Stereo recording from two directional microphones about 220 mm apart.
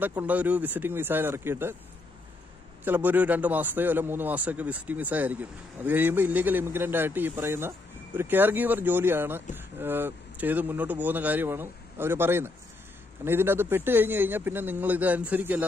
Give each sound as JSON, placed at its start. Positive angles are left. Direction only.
{"t": 0.0, "sound": "a man's voice", "side_deg": -10}
{"t": 2.8, "sound": "a man's voice", "side_deg": -10}